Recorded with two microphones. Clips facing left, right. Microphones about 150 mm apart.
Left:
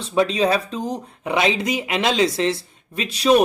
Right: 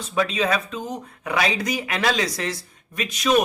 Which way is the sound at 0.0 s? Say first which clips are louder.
Left 4 dB; 25° left (ahead or behind).